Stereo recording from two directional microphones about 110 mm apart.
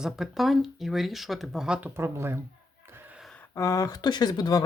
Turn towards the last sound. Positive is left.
turn(degrees=35)  # may be behind; listen again after turning